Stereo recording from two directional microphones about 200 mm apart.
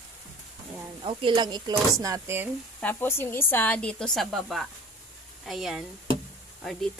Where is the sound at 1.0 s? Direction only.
25° right (ahead or behind).